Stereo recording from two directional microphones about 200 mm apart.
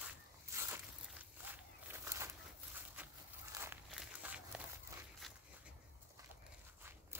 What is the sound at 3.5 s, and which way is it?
Crumpling, 15° right (ahead or behind).